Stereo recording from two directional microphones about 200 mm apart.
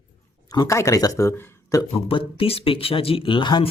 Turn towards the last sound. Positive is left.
turn(degrees=25)  # may be behind; listen again after turning